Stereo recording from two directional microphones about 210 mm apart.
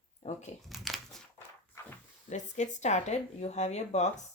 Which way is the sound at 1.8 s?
10° left (ahead or behind).